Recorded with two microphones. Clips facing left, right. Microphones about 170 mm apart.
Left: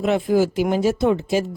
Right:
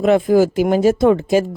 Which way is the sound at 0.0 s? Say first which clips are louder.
Right 5 dB; 50° right (ahead or behind).